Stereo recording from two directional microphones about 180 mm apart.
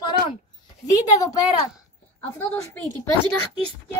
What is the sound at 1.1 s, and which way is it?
A child's voice, 20° left (ahead or behind).